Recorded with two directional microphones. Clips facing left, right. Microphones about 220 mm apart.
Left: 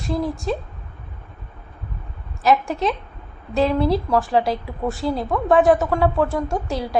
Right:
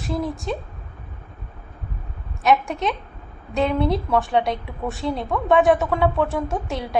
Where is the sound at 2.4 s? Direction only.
Centre (ahead or behind).